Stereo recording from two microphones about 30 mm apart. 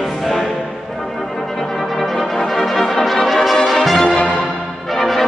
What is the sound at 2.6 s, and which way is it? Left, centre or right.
Music, centre.